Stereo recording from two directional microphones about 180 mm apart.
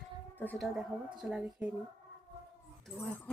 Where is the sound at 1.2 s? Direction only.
5° right (ahead or behind).